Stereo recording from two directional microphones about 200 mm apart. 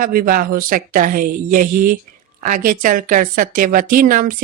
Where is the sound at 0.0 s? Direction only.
45° right (ahead or behind).